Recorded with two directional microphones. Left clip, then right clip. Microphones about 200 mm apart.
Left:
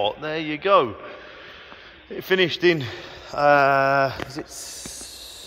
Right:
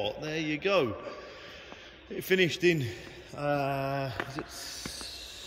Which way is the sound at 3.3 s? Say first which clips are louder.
Left 14 dB; 50° left (ahead or behind).